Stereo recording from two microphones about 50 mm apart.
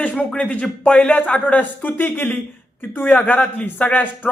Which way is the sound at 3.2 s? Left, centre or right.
Left.